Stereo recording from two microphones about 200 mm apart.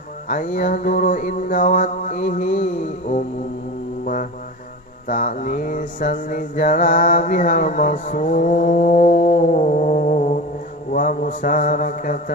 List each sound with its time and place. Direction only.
0.3 s mantra: 40° left (ahead or behind)
4.0 s music: 40° left (ahead or behind)
5.0 s mantra: 40° left (ahead or behind)